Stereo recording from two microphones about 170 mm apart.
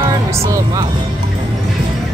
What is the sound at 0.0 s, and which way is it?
Music, 20° right (ahead or behind).